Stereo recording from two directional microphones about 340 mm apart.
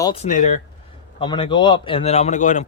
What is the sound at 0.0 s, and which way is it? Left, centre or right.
Speech, centre.